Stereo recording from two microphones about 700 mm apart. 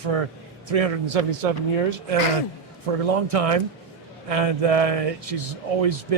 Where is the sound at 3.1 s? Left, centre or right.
Right.